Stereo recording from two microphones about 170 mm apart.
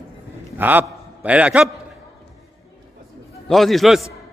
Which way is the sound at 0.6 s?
10° right (ahead or behind).